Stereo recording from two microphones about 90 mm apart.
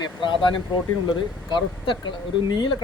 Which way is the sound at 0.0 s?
60° left (ahead or behind).